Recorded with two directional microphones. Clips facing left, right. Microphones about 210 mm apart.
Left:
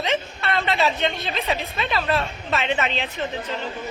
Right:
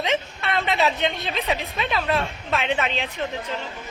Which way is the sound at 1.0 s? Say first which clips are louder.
Even; 15° right (ahead or behind).